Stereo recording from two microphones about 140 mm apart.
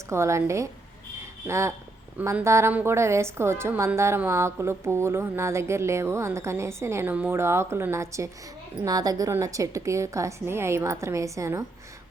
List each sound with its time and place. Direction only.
0.1 s a woman's voice: 20° right (ahead or behind)